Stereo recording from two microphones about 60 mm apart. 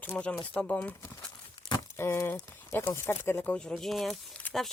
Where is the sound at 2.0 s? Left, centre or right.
Left.